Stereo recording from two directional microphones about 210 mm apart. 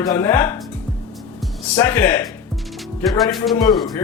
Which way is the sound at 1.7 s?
10° left (ahead or behind).